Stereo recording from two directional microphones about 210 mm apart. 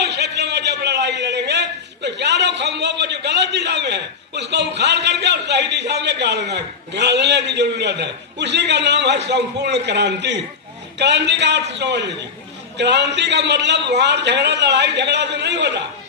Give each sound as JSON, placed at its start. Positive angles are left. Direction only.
{"t": 0.0, "sound": "a man's voice", "side_deg": -50}